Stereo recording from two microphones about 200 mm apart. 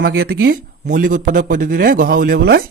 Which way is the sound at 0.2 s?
50° right (ahead or behind).